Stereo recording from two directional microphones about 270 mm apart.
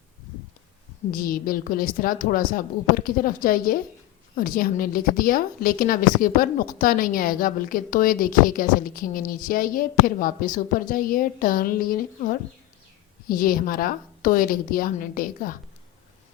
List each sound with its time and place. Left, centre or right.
1.1 s a woman's voice: left